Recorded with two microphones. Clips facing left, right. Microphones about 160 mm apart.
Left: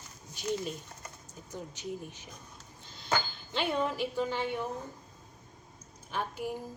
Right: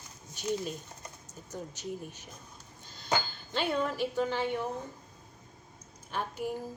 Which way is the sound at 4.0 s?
15° left (ahead or behind).